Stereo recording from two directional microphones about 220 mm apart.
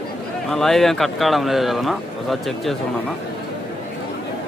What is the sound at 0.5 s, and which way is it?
Speech, centre (ahead or behind).